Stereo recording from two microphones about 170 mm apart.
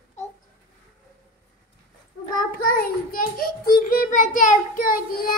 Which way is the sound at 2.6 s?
60° left (ahead or behind).